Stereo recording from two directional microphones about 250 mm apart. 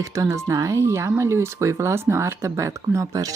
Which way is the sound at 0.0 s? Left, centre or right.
Centre.